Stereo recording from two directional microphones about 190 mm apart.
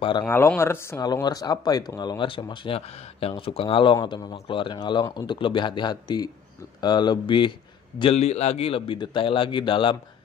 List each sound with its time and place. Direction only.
0.2 s speech: 10° left (ahead or behind); by 9.9 s 25° left (ahead or behind)